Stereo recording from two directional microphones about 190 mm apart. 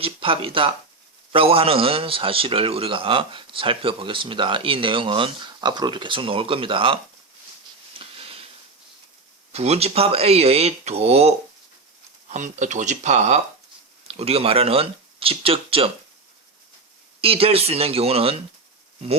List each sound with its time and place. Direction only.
0.0 s a man's voice: 30° right (ahead or behind)
7.9 s a sound: 30° right (ahead or behind)
9.5 s a man's voice: 35° right (ahead or behind)
17.2 s speech: 30° right (ahead or behind)